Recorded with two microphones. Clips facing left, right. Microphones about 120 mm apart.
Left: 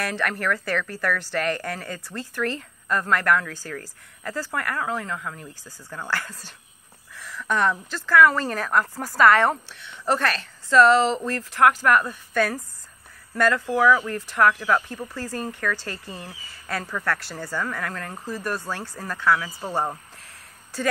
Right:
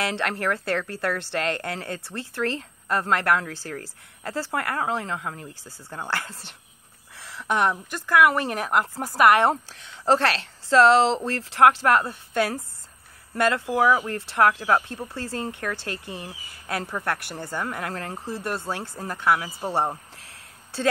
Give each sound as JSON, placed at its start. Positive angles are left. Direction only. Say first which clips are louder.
{"t": 0.0, "sound": "a woman's voice", "louder": "even", "side_deg": -25}
{"t": 10.9, "sound": "speech", "louder": "right 1 dB", "side_deg": -90}
{"t": 11.1, "sound": "a woman's voice", "louder": "right 2 dB", "side_deg": -30}